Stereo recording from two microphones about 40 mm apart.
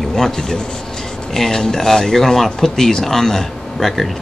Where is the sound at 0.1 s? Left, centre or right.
Centre.